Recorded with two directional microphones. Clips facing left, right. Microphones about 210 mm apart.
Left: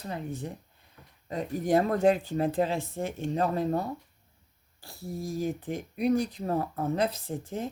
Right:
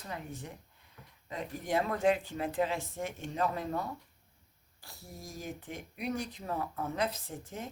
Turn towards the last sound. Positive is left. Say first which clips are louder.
# left 8 dB
turn(degrees=35)  # may be behind; listen again after turning